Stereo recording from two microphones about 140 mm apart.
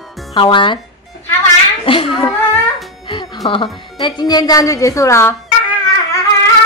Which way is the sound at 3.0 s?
35° left (ahead or behind).